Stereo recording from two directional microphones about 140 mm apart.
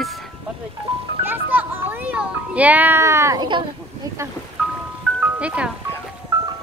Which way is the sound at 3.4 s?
35° right (ahead or behind).